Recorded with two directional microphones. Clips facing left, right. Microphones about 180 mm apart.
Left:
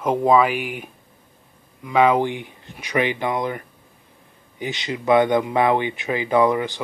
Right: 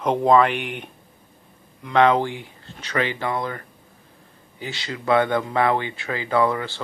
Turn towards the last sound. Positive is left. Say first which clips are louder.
# left 3 dB
turn(degrees=15)  # may be behind; listen again after turning